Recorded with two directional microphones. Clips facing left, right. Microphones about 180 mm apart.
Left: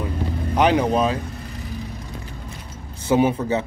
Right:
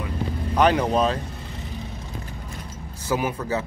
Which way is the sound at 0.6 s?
15° left (ahead or behind).